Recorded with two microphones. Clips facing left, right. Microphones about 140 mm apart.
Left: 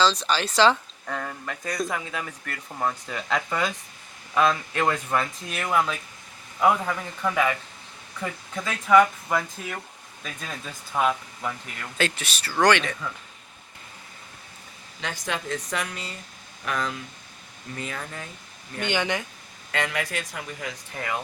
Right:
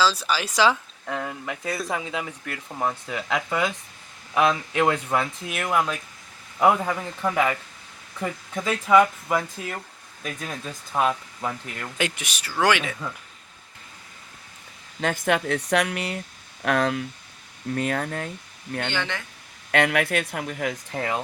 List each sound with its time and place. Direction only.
0.0 s speech: 10° right (ahead or behind)
1.9 s a man's voice: 20° right (ahead or behind)
6.6 s a man's voice: 20° right (ahead or behind)
8.2 s speech: 10° right (ahead or behind)
11.9 s speech: 15° right (ahead or behind)
15.0 s speech: 55° right (ahead or behind)
18.9 s speech: 15° left (ahead or behind)
19.7 s speech: 65° right (ahead or behind)
20.9 s a man's voice: 30° right (ahead or behind)